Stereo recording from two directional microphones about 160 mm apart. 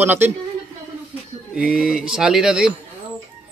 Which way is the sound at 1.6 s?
5° right (ahead or behind).